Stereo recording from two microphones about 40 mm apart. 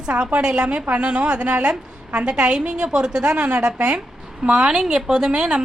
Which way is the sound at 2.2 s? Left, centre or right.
Right.